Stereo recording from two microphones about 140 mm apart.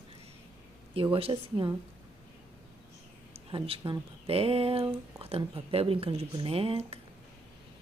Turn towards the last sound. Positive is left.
turn(degrees=-45)  # may be behind; listen again after turning